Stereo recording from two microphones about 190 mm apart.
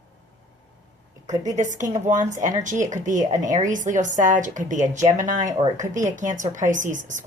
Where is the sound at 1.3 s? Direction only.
40° right (ahead or behind).